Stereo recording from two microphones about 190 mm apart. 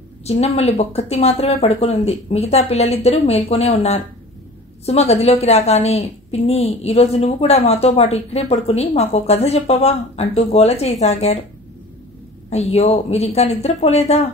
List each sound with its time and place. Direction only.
0.2 s a woman's voice: 35° left (ahead or behind)
12.4 s a woman's voice: 35° left (ahead or behind)